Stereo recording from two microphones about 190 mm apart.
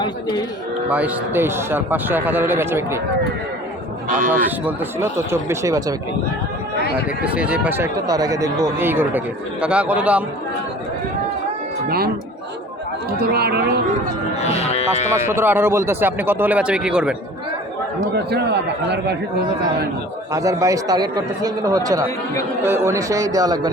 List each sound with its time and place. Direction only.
0.0 s speech: 25° left (ahead or behind)
0.9 s speech: 5° right (ahead or behind)
4.3 s speech: 10° right (ahead or behind)
7.3 s speech: 5° right (ahead or behind)
11.9 s a man's voice: 55° right (ahead or behind)
14.3 s speech: 35° left (ahead or behind)
15.1 s speech: 15° right (ahead or behind)
18.3 s a man's voice: 60° right (ahead or behind)
20.3 s speech: 15° right (ahead or behind)